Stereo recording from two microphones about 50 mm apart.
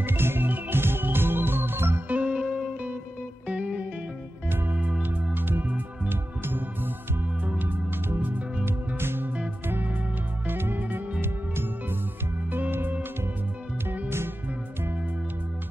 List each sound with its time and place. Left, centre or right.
0.0 s music: right
2.0 s music: right
2.3 s music: centre; by 5.4 s right
6.0 s music: right
8.6 s music: right
10.4 s music: right
12.4 s music: right